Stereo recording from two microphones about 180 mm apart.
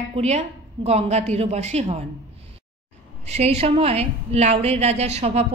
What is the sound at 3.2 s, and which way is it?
A woman's voice, 35° right (ahead or behind).